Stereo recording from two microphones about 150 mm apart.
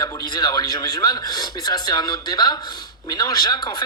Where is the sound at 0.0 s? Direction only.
25° left (ahead or behind).